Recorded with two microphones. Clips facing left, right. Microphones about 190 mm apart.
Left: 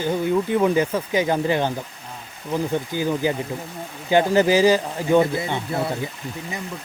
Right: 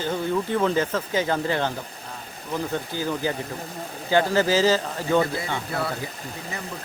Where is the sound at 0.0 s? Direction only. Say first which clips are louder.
Left 4 dB; 15° left (ahead or behind).